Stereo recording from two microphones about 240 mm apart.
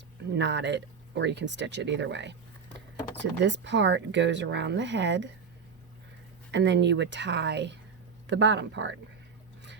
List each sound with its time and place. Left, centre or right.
0.3 s speech: right
6.5 s speech: right